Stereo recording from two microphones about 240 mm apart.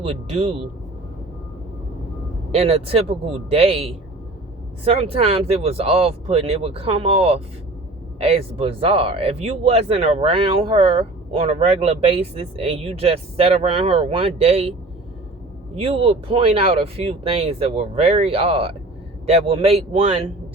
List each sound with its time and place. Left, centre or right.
0.0 s speech: right
2.5 s speech: right
15.7 s speech: right